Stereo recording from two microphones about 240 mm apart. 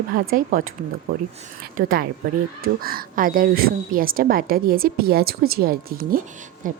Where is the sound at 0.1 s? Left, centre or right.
Right.